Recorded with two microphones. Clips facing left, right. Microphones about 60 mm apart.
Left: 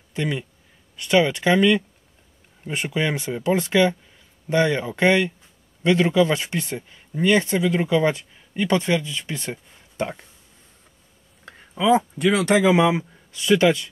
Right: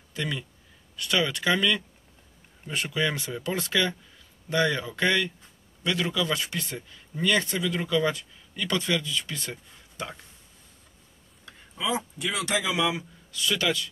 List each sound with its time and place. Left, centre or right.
0.1 s speech: left
11.4 s speech: left